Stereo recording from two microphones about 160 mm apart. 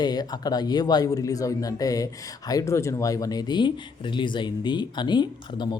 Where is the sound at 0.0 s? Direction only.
25° left (ahead or behind).